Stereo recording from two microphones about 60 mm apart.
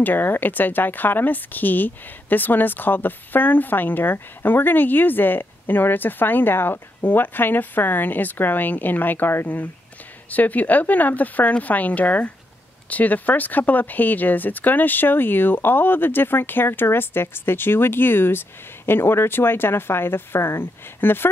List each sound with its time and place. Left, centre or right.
0.0 s speech: left